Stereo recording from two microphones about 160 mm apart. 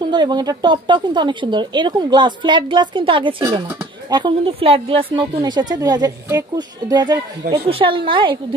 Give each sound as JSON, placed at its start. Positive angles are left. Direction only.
{"t": 0.0, "sound": "a woman's voice", "side_deg": -25}